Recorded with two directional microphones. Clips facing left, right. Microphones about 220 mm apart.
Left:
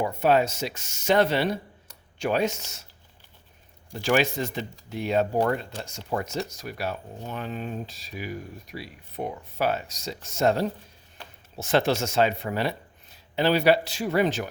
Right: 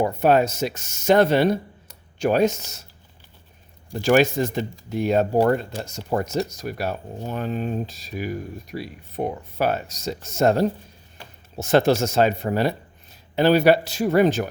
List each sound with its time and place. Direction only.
0.0 s speech: 45° right (ahead or behind)
3.9 s speech: 45° right (ahead or behind)